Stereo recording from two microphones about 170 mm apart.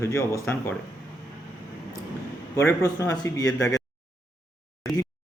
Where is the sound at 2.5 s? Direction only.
15° left (ahead or behind).